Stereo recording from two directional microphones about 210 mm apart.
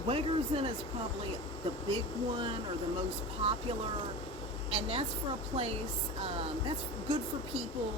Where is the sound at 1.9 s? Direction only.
25° right (ahead or behind).